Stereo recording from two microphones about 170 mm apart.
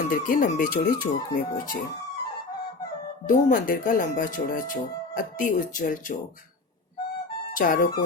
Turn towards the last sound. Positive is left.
turn(degrees=50)  # may be behind; listen again after turning